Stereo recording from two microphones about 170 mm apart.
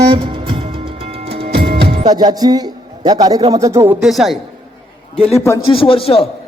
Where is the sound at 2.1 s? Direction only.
25° right (ahead or behind); by 4.4 s centre (ahead or behind).